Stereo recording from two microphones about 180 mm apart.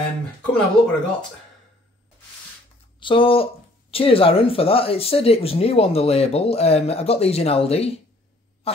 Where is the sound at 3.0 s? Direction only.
30° left (ahead or behind).